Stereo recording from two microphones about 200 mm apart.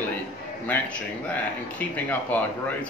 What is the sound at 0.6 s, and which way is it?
Speech, 10° left (ahead or behind).